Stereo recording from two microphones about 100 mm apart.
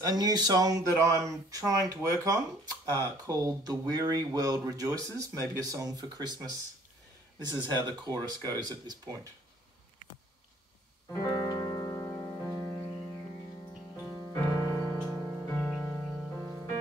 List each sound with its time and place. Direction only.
0.0 s speech: 40° right (ahead or behind)
11.1 s music: 35° left (ahead or behind)
15.0 s music: 10° left (ahead or behind)
15.8 s music: 10° left (ahead or behind)